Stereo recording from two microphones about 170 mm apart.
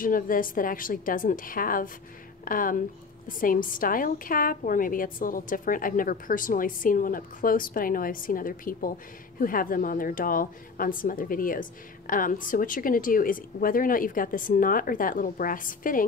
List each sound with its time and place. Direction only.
0.0 s a woman's voice: 55° left (ahead or behind)